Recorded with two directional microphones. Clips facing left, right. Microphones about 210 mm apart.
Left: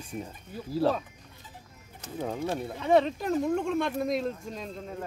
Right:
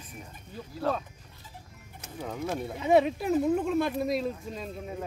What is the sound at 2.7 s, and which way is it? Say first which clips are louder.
Speech: right 1 dB; 10° right (ahead or behind).